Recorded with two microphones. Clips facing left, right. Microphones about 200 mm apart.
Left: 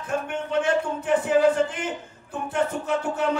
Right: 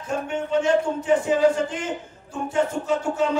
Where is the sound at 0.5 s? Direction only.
60° left (ahead or behind).